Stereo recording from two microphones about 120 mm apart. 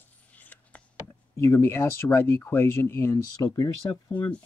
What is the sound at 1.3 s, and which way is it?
Speech, 20° left (ahead or behind).